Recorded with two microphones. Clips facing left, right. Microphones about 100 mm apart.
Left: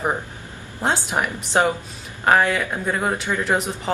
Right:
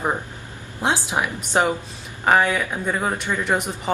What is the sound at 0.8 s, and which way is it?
Speech, 5° right (ahead or behind).